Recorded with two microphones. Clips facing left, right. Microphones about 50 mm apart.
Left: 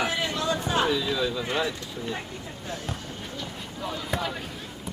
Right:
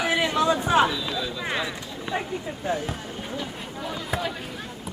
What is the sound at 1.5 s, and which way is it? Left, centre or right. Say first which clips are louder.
Speech: left 1 dB; centre.